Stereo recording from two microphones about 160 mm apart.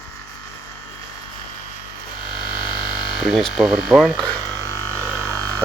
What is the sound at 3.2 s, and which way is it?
Speech, centre (ahead or behind).